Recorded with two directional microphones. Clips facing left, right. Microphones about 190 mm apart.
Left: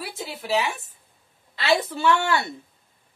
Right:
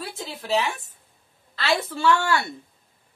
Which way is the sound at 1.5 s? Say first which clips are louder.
Left 2 dB; 20° left (ahead or behind).